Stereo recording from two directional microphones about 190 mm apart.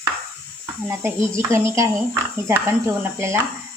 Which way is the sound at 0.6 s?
15° right (ahead or behind).